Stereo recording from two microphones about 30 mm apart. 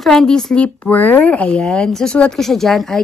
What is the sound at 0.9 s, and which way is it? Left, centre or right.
Speech, left.